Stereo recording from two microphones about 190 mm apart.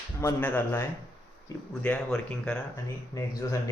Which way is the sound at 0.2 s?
15° left (ahead or behind).